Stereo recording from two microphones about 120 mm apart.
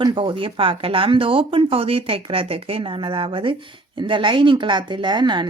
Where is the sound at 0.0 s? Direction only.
45° right (ahead or behind).